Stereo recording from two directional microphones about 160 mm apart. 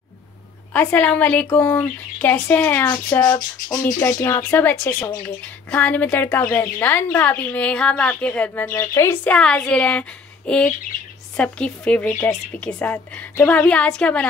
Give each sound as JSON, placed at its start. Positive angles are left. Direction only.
{"t": 0.7, "sound": "speech", "side_deg": 10}
{"t": 3.3, "sound": "a sound", "side_deg": 25}
{"t": 3.8, "sound": "speech", "side_deg": 15}